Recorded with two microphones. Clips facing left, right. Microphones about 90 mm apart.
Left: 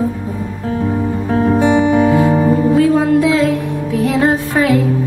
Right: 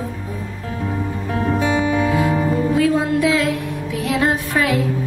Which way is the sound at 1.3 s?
30° left (ahead or behind).